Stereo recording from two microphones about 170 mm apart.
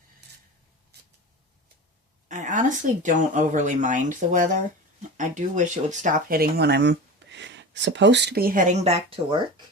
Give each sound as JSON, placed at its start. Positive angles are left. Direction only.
{"t": 0.2, "sound": "rub", "side_deg": -90}
{"t": 2.2, "sound": "speech", "side_deg": -45}